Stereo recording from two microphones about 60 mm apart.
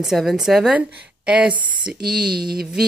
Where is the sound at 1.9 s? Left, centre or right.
Centre.